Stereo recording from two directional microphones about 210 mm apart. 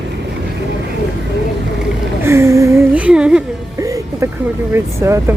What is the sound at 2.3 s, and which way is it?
Speech, 15° right (ahead or behind).